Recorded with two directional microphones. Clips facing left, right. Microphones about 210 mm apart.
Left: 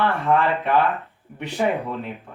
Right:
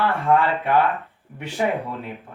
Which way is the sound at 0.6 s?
15° right (ahead or behind).